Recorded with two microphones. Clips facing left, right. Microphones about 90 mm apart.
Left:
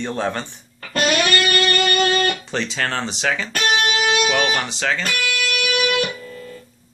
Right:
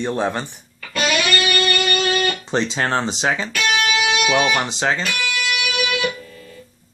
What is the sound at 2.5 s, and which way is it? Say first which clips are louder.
Speech: right 4 dB; 25° right (ahead or behind).